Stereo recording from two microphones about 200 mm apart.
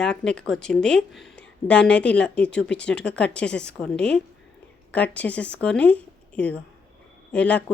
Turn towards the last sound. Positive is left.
turn(degrees=5)  # may be behind; listen again after turning